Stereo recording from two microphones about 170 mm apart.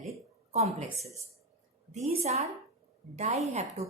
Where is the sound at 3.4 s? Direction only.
40° right (ahead or behind).